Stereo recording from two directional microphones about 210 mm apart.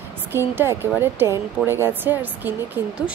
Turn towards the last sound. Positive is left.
turn(degrees=-5)  # may be behind; listen again after turning